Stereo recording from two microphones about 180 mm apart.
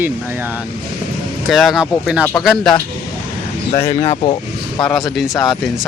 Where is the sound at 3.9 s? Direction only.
30° left (ahead or behind).